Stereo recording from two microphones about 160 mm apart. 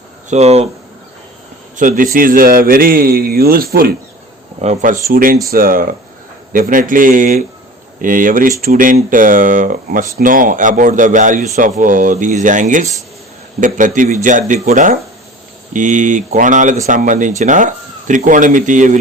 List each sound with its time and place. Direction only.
0.3 s speech: 45° right (ahead or behind)
1.7 s a man's voice: 55° right (ahead or behind)
4.6 s speech: 50° right (ahead or behind)
5.0 s a man's voice: 60° right (ahead or behind)